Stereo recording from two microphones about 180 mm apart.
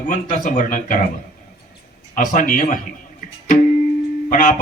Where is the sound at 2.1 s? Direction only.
50° left (ahead or behind).